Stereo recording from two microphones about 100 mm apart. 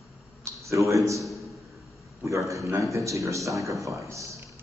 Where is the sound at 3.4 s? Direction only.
Centre (ahead or behind).